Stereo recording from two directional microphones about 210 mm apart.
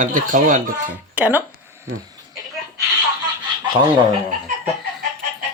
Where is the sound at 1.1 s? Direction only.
5° right (ahead or behind).